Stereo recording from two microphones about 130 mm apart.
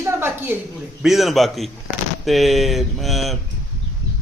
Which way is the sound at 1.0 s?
Centre (ahead or behind).